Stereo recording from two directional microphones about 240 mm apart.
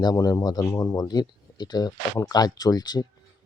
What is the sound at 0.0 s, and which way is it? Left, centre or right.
Speech, centre.